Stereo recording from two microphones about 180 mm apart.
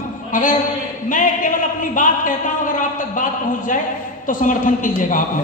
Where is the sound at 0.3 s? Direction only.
50° left (ahead or behind).